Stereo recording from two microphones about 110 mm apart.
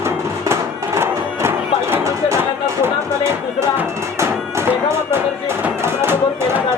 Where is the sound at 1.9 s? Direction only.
25° right (ahead or behind).